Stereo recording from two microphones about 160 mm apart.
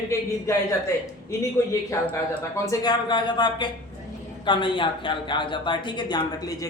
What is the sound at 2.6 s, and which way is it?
A man's voice, 25° left (ahead or behind).